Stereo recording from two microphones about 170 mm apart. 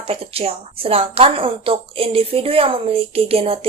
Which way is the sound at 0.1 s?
35° right (ahead or behind).